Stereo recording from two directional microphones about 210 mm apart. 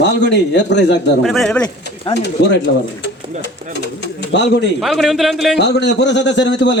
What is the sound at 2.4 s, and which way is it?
Speech, 50° left (ahead or behind).